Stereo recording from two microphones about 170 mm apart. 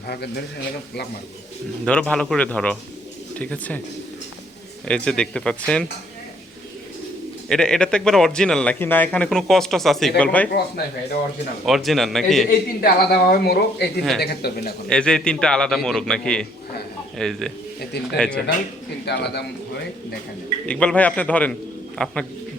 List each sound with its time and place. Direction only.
0.1 s a man's voice: 75° left (ahead or behind)
1.8 s a man's voice: 5° left (ahead or behind)
4.9 s speech: 5° left (ahead or behind)
7.5 s a man's voice: 5° left (ahead or behind)
11.6 s speech: centre (ahead or behind)
12.5 s a man's voice: 60° left (ahead or behind)
14.8 s speech: 5° left (ahead or behind)
19.0 s a man's voice: 80° left
20.7 s a man's voice: 5° left (ahead or behind)